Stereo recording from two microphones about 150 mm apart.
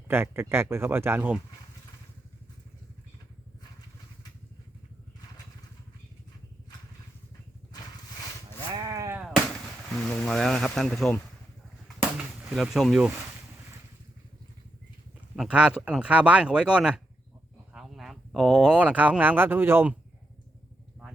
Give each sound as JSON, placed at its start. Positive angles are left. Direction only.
{"t": 0.1, "sound": "speech", "side_deg": -15}
{"t": 8.7, "sound": "sheep", "side_deg": -25}
{"t": 9.1, "sound": "a sound", "side_deg": -5}
{"t": 9.9, "sound": "speech", "side_deg": 0}
{"t": 15.4, "sound": "speech", "side_deg": -5}